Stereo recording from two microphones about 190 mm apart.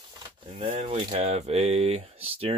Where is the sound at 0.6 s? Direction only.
40° right (ahead or behind).